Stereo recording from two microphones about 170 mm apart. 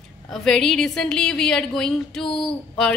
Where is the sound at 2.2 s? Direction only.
30° left (ahead or behind).